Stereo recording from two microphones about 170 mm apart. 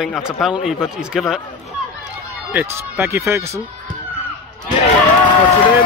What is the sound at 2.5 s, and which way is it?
Speech, 15° right (ahead or behind).